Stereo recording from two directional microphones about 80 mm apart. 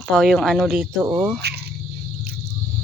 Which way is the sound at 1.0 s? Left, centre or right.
Right.